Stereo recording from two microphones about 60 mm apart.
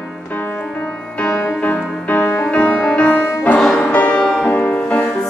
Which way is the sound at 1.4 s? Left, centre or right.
Left.